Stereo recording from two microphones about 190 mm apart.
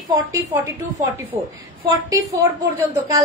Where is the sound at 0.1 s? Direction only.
20° right (ahead or behind).